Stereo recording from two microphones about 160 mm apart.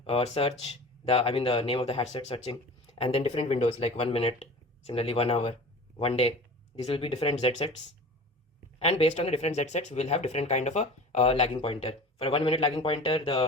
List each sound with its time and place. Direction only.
0.0 s speech: 35° left (ahead or behind)
8.8 s speech: 40° left (ahead or behind)